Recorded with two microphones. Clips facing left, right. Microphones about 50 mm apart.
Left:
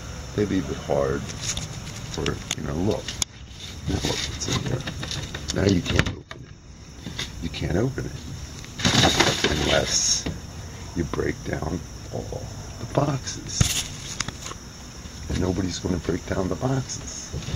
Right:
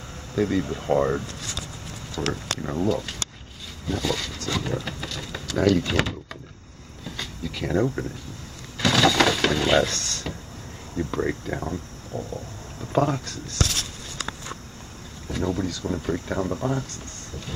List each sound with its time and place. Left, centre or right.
0.3 s speech: centre
2.3 s speech: centre
8.7 s a sound: centre
11.0 s speech: centre
12.1 s speech: centre
15.2 s speech: centre